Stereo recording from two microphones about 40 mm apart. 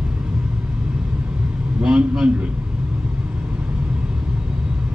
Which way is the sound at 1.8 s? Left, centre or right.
Right.